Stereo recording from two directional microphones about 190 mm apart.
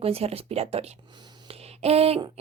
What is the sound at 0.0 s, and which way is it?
Speech, 30° right (ahead or behind).